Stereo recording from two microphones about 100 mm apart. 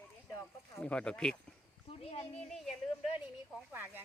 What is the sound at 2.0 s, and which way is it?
Speech, 90° left.